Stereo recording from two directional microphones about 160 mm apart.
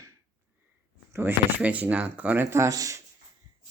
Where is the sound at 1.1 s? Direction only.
15° right (ahead or behind).